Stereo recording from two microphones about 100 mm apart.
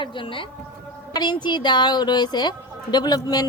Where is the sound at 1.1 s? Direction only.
45° left (ahead or behind).